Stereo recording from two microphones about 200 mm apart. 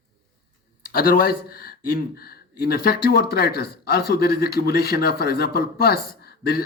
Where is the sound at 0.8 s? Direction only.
45° left (ahead or behind).